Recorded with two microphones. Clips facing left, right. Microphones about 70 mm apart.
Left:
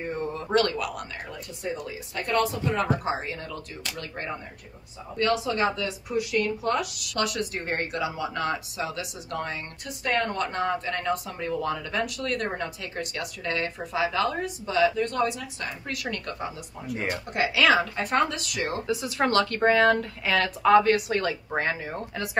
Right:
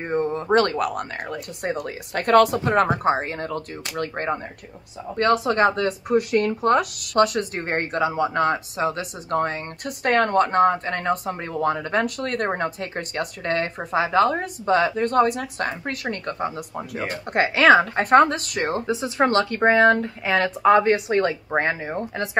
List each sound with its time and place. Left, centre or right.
0.0 s speech: right
1.6 s speech: right
9.8 s speech: right
16.5 s speech: right
17.1 s speech: right
18.9 s speech: right